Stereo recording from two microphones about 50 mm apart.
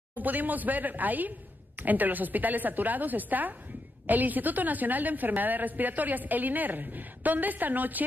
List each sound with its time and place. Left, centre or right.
0.1 s a woman's voice: right